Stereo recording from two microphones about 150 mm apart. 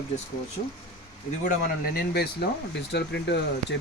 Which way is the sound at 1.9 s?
90° left.